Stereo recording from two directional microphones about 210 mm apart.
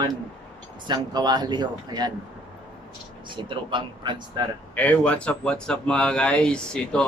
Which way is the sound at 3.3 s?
25° right (ahead or behind).